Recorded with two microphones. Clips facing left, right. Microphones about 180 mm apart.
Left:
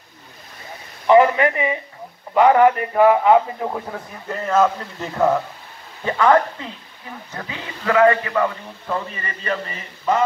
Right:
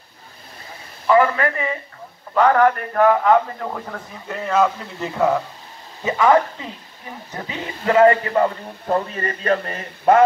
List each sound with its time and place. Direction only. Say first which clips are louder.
1.0 s a man's voice: left 3 dB; 20° left (ahead or behind); by 6.4 s 10° right (ahead or behind)
7.3 s a man's voice: right 3 dB; 25° right (ahead or behind); by 10.2 s 55° right (ahead or behind)